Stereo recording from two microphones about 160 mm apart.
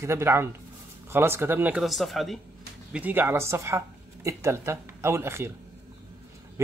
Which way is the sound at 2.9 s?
10° right (ahead or behind).